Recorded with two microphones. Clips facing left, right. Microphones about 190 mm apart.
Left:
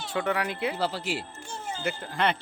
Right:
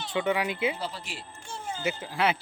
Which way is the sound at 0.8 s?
70° left (ahead or behind).